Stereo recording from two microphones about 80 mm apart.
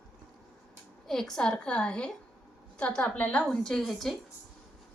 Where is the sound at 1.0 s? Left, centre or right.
Centre; by 3.4 s left.